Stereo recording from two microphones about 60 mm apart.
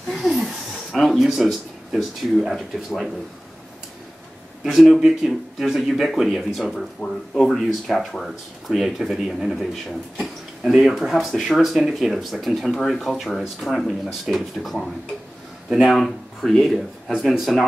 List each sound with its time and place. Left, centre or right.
0.1 s speech: centre
4.6 s speech: centre
7.0 s speech: left
7.3 s speech: centre